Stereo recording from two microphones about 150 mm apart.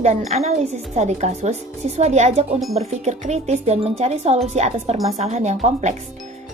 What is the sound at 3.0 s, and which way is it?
Speech, 50° right (ahead or behind).